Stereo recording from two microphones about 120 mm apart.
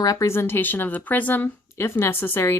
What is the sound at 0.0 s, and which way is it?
Speech, 25° left (ahead or behind).